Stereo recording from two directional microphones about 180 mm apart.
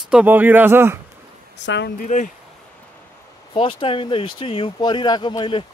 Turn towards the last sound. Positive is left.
turn(degrees=25)  # may be behind; listen again after turning